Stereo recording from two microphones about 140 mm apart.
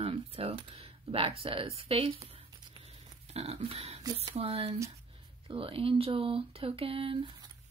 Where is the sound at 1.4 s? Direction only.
40° right (ahead or behind).